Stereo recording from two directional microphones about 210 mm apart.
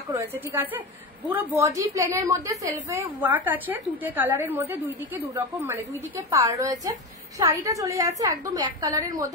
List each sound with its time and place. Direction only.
0.1 s a woman's voice: 10° right (ahead or behind)